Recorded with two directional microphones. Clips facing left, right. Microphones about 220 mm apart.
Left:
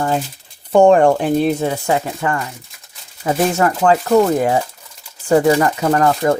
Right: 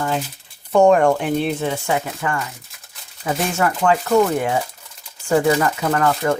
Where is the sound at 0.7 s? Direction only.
30° left (ahead or behind).